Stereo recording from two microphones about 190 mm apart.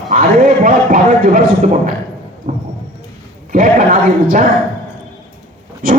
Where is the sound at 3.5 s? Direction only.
45° right (ahead or behind).